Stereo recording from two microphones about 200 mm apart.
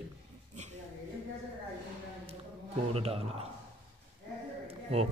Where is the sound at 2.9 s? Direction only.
30° right (ahead or behind).